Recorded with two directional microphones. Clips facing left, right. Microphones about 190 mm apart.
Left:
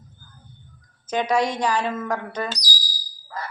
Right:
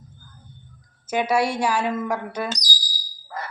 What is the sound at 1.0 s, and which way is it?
Speech, 10° right (ahead or behind).